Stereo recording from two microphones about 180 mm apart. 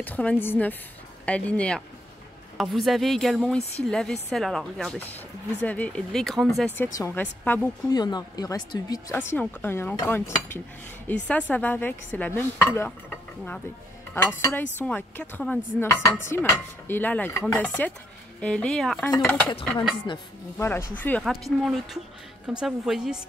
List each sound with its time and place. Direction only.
0.0 s speech: 10° left (ahead or behind)
7.9 s a woman's voice: 20° left (ahead or behind)
14.1 s speech: 15° left (ahead or behind); by 23.2 s 5° right (ahead or behind)